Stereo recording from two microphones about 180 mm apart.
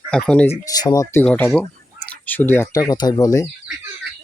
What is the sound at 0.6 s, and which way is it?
Speech, 20° left (ahead or behind).